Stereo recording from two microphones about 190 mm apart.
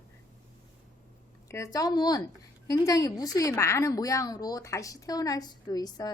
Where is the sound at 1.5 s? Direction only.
15° left (ahead or behind).